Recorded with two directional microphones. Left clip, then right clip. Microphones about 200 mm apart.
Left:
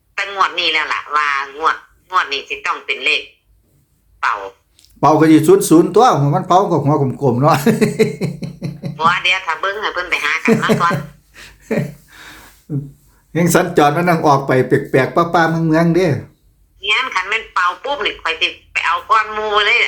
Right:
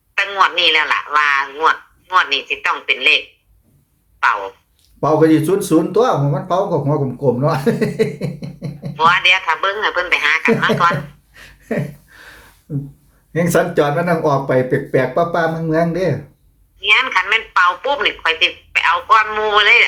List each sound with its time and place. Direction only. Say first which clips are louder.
0.1 s speech: right 2 dB; 5° right (ahead or behind)
4.9 s speech: left 2 dB; 35° left (ahead or behind)
9.0 s speech: right 2 dB; 10° right (ahead or behind)
11.3 s a sound: left 2 dB; 25° left (ahead or behind)
12.7 s speech: left 2 dB; 25° left (ahead or behind)
16.8 s speech: right 3 dB; 10° right (ahead or behind)